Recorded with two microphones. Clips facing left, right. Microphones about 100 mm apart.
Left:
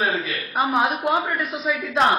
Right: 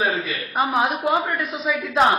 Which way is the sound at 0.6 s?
Centre (ahead or behind).